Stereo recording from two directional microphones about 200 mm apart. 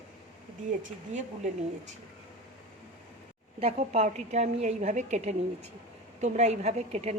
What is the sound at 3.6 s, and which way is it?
A woman's voice, 35° right (ahead or behind).